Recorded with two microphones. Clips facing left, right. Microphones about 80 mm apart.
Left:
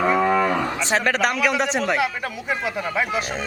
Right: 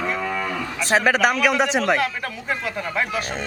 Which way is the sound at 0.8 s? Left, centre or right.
Centre.